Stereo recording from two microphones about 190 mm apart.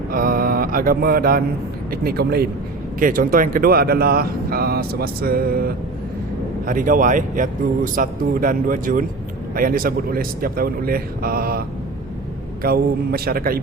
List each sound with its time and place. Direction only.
0.1 s mantra: 50° right (ahead or behind)
1.9 s speech: 55° right (ahead or behind)
12.6 s speech: 55° right (ahead or behind)